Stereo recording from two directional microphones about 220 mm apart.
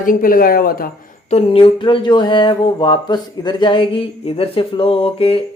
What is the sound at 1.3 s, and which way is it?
Speech, 25° left (ahead or behind).